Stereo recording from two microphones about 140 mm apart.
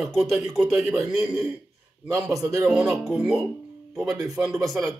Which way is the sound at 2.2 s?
5° right (ahead or behind).